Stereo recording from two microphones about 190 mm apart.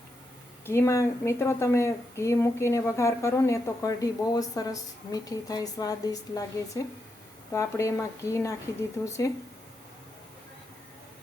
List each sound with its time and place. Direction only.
0.6 s a woman's voice: 15° left (ahead or behind)